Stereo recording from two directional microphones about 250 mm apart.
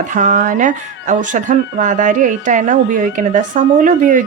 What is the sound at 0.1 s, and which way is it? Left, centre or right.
Speech, right.